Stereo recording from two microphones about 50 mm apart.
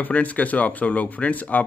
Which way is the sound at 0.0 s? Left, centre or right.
Left.